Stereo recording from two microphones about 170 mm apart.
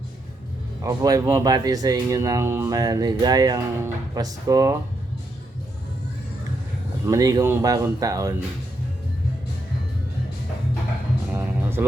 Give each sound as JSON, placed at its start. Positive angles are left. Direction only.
{"t": 0.8, "sound": "speech", "side_deg": -20}
{"t": 7.1, "sound": "speech", "side_deg": -20}
{"t": 11.3, "sound": "music", "side_deg": -15}